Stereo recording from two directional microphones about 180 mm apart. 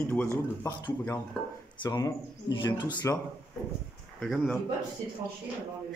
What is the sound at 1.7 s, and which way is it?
Speech, 25° left (ahead or behind).